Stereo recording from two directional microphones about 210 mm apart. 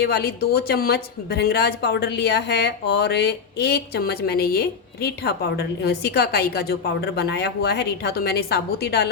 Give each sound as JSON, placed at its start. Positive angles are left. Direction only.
{"t": 0.0, "sound": "a woman's voice", "side_deg": 50}